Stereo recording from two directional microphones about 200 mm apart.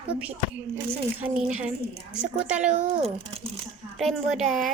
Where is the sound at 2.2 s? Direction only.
5° right (ahead or behind).